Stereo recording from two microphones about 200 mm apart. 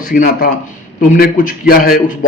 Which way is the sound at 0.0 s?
45° left (ahead or behind).